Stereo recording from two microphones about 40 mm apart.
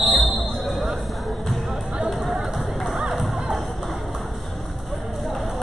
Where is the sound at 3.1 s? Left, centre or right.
Centre.